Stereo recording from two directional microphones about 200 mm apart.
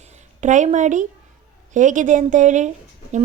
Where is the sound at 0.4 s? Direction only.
35° right (ahead or behind).